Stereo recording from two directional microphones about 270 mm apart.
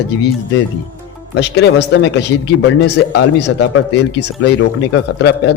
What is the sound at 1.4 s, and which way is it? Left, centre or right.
A man's voice, left.